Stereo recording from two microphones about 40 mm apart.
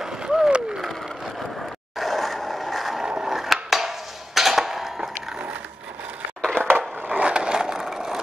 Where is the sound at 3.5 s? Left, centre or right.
Centre.